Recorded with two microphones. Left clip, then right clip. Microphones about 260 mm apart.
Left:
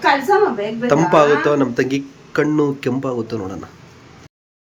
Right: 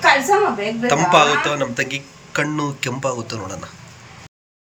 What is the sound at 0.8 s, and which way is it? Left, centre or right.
Speech, centre.